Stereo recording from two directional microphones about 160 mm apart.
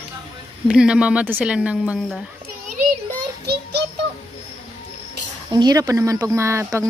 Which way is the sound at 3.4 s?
90° right.